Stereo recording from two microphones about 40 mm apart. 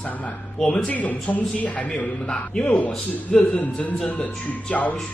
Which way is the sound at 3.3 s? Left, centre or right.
Left.